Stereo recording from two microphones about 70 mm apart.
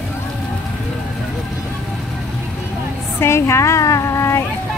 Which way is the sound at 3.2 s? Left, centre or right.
Left.